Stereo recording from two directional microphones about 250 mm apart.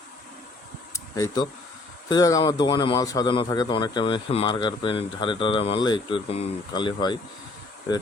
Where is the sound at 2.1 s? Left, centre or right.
Centre.